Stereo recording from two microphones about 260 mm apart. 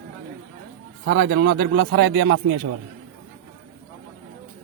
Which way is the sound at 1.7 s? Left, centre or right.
Right.